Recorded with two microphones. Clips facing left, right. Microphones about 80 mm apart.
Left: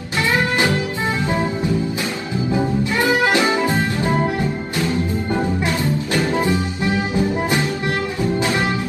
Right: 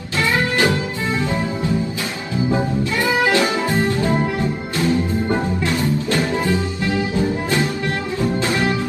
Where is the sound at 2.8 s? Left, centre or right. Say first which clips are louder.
Left 1 dB; left.